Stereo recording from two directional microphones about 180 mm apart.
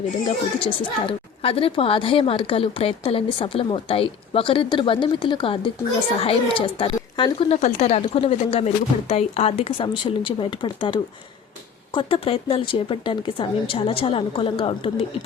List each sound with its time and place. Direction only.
0.6 s a woman's voice: 30° left (ahead or behind)